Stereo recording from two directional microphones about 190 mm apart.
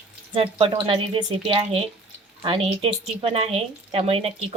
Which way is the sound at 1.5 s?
30° right (ahead or behind).